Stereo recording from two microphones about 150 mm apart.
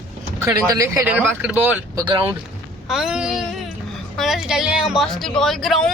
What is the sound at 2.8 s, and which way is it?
A woman's voice, 5° right (ahead or behind).